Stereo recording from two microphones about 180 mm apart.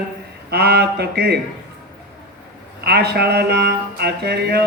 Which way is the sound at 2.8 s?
65° right (ahead or behind).